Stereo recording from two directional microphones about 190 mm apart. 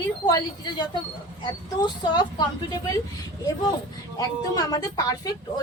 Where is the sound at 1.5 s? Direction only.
20° left (ahead or behind).